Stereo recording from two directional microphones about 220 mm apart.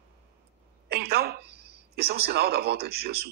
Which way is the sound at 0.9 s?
45° right (ahead or behind).